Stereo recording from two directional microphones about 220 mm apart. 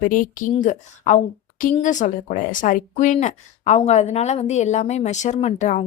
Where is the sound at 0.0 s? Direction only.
40° left (ahead or behind).